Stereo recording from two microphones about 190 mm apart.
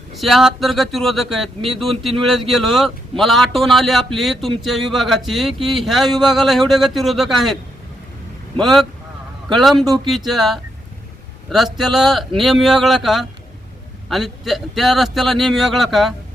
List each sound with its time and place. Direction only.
0.2 s speech: centre (ahead or behind)
9.8 s speech: 20° right (ahead or behind)
10.2 s speech: centre (ahead or behind)